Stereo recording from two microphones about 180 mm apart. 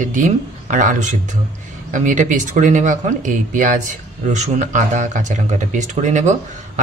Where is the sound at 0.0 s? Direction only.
45° right (ahead or behind).